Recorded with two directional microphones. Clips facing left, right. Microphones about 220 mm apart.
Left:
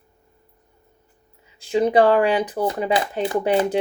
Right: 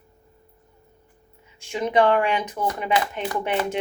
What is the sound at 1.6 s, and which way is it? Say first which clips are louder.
Speech: left 4 dB; 35° left (ahead or behind).